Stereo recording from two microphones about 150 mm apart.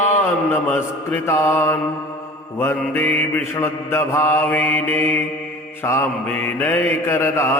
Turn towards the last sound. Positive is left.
turn(degrees=20)  # may be behind; listen again after turning